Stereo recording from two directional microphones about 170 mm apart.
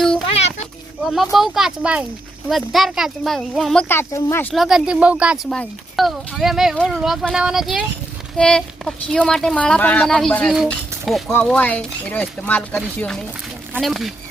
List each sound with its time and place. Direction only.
0.3 s a sound: 40° left (ahead or behind)
1.0 s speech: centre (ahead or behind)
3.8 s speech: 15° left (ahead or behind)
4.5 s speech: centre (ahead or behind)